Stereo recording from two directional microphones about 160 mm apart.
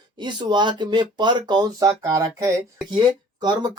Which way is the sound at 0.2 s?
30° right (ahead or behind).